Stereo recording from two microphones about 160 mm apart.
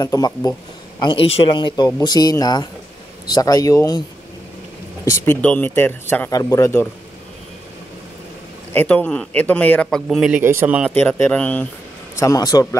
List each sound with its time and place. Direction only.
0.0 s speech: 20° left (ahead or behind)
1.0 s speech: 35° left (ahead or behind)
2.0 s speech: 25° left (ahead or behind)
5.2 s a man's voice: 10° left (ahead or behind)
8.7 s a man's voice: 10° left (ahead or behind)
10.4 s speech: 15° right (ahead or behind)
10.9 s a man's voice: 5° left (ahead or behind)
12.2 s speech: 20° left (ahead or behind)